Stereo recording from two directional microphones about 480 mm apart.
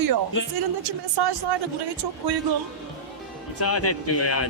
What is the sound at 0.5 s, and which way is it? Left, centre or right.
Speech, right.